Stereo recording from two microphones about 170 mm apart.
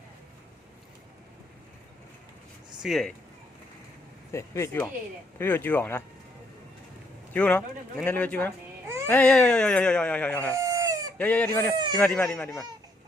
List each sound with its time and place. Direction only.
2.8 s speech: centre (ahead or behind)
4.3 s speech: 15° left (ahead or behind)
7.3 s speech: 5° left (ahead or behind)
10.5 s chicken: 20° right (ahead or behind)
11.2 s speech: 10° left (ahead or behind)